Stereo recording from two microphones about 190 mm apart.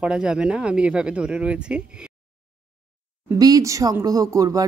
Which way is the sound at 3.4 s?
20° right (ahead or behind).